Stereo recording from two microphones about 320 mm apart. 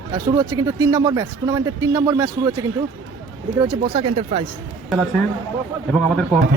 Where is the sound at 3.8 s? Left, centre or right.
Centre.